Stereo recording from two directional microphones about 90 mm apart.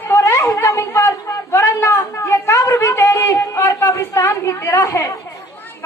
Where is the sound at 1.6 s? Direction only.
50° left (ahead or behind).